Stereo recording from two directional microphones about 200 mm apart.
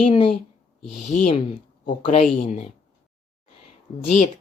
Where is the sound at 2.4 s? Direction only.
40° left (ahead or behind).